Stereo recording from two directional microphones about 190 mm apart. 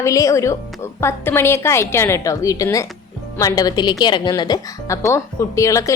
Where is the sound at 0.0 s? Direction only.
15° left (ahead or behind).